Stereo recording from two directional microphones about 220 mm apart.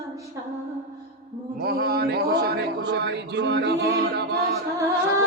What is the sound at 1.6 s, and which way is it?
Speech, 45° right (ahead or behind).